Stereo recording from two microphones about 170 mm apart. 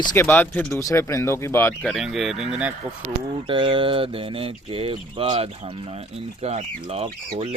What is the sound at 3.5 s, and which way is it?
Speech, 30° right (ahead or behind).